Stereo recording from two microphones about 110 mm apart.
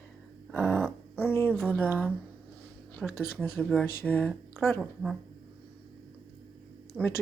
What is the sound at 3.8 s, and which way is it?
Speech, 15° left (ahead or behind).